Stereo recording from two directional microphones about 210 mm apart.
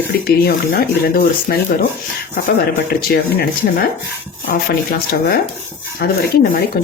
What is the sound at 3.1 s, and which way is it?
Speech, 45° left (ahead or behind).